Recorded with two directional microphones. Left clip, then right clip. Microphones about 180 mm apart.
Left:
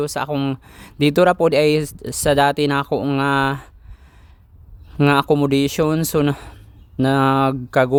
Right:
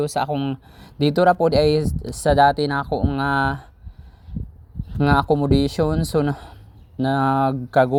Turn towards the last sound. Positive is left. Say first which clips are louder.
# left 1 dB
turn(degrees=20)  # may be behind; listen again after turning